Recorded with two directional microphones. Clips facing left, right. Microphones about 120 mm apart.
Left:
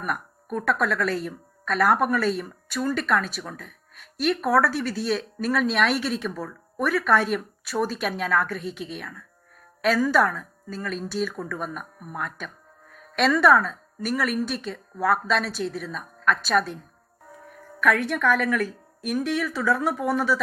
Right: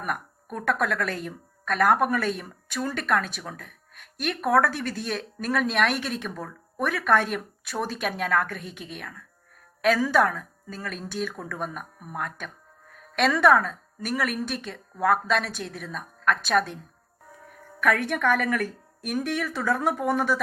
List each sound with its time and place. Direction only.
0.5 s a woman's voice: 50° right (ahead or behind)
17.7 s a woman's voice: 55° right (ahead or behind)